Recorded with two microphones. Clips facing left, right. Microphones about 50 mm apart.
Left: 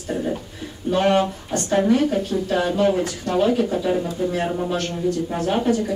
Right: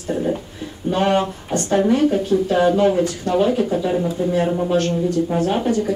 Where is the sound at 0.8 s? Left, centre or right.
Centre.